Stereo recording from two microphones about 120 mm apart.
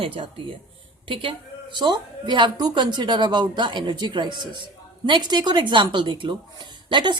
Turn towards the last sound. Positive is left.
turn(degrees=-40)  # may be behind; listen again after turning